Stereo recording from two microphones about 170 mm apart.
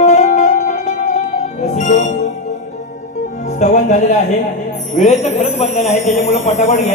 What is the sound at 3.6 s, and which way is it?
Music, 45° left (ahead or behind).